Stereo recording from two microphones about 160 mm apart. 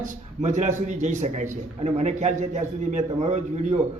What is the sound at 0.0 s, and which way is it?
A man's voice, 50° right (ahead or behind).